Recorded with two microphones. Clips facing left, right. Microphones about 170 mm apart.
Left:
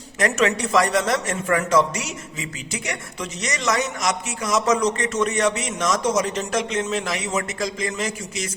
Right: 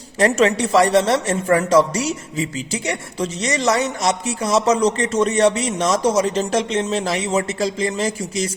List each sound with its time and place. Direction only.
0.2 s speech: 30° right (ahead or behind)